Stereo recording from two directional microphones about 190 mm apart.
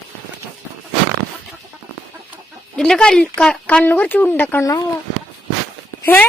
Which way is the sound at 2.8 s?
5° left (ahead or behind).